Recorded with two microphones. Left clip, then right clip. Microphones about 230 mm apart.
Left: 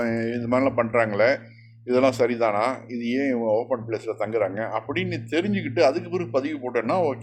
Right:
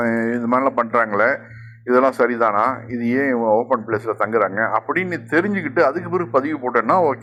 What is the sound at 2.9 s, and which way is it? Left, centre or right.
Speech, right.